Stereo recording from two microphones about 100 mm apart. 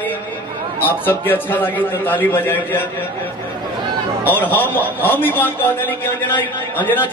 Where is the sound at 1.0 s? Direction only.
20° left (ahead or behind).